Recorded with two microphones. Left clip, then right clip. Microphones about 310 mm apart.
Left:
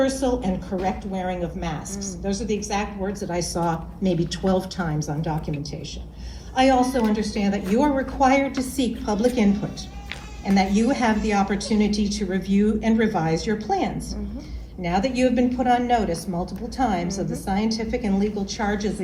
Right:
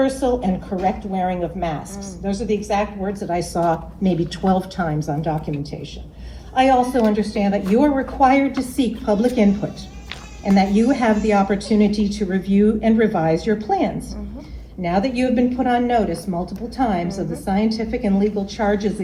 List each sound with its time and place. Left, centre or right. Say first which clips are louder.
0.1 s a woman's voice: right 4 dB; centre
6.6 s a woman's voice: right 3 dB; centre